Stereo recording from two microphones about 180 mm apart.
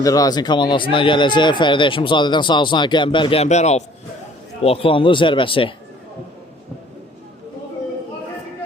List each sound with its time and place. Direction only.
0.0 s speech: 20° left (ahead or behind)